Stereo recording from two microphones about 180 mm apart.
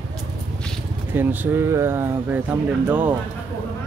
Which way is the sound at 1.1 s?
10° right (ahead or behind).